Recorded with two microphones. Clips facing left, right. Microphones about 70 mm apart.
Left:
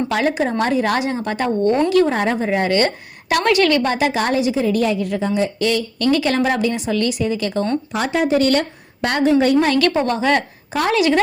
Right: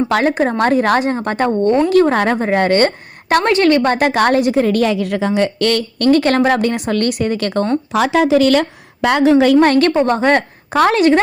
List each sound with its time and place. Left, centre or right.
0.1 s a woman's voice: right
6.1 s a woman's voice: right
8.0 s a woman's voice: right
9.6 s a woman's voice: right
10.7 s a woman's voice: right